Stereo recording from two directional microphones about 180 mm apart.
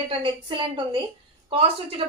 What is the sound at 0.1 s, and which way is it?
A woman's voice, 25° right (ahead or behind).